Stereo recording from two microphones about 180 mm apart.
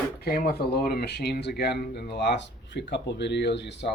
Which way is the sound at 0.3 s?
55° left (ahead or behind).